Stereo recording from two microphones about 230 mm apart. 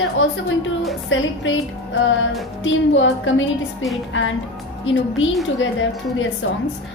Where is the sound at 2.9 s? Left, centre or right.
Left.